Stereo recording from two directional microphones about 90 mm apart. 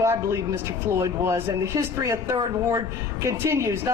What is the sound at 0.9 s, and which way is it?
Speech, 35° right (ahead or behind).